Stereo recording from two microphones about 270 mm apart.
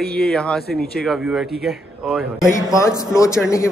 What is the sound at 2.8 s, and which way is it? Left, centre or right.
Speech, centre.